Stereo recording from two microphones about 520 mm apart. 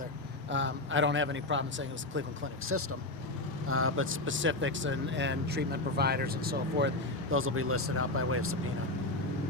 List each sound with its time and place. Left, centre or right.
0.5 s speech: right
3.7 s speech: right